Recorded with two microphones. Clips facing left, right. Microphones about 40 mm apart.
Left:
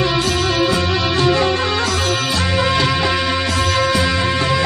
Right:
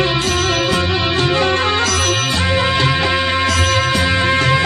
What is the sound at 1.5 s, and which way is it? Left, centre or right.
Music, right.